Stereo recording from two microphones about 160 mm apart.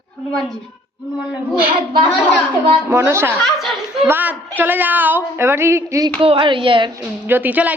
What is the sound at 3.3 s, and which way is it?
Speech, centre (ahead or behind).